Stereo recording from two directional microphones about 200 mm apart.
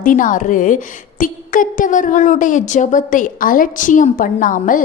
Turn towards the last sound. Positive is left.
turn(degrees=40)  # may be behind; listen again after turning